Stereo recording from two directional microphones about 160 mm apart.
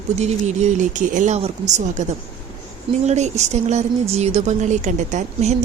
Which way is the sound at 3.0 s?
45° right (ahead or behind).